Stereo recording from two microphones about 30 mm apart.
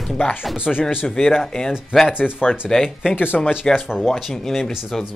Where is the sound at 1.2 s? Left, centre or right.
Centre.